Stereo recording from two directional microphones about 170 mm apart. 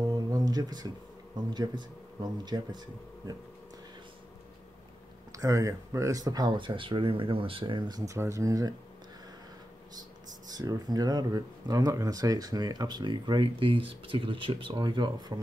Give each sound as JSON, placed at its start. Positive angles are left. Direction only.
{"t": 0.0, "sound": "a sound", "side_deg": -20}
{"t": 1.5, "sound": "speech", "side_deg": -25}
{"t": 5.4, "sound": "speech", "side_deg": -20}
{"t": 10.5, "sound": "speech", "side_deg": -20}